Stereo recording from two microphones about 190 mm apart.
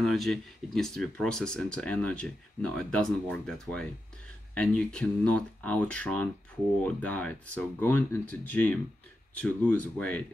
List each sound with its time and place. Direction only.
0.0 s speech: centre (ahead or behind)